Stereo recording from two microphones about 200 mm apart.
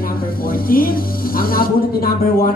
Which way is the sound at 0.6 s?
45° left (ahead or behind).